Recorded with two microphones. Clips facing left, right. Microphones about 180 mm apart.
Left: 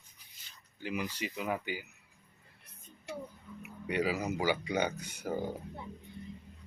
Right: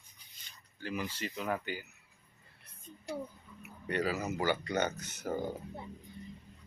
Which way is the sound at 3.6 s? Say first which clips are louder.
Left 1 dB; 10° left (ahead or behind).